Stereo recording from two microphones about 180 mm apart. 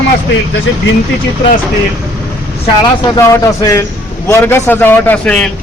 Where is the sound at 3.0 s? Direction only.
20° left (ahead or behind).